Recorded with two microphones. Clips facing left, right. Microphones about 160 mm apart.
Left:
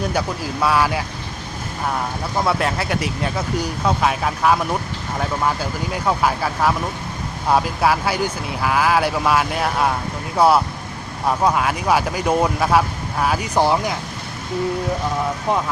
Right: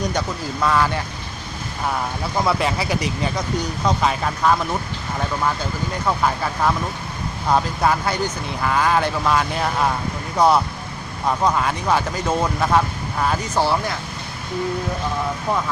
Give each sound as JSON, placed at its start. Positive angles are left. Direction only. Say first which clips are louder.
{"t": 0.0, "sound": "speech", "louder": "left 1 dB", "side_deg": 10}
{"t": 2.4, "sound": "speech", "louder": "even", "side_deg": 0}